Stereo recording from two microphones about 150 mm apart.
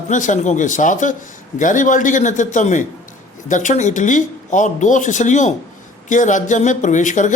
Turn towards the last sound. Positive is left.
turn(degrees=55)  # may be behind; listen again after turning